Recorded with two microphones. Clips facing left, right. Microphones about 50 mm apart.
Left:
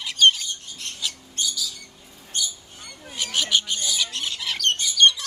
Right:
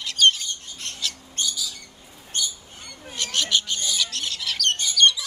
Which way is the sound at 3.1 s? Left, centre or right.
Centre.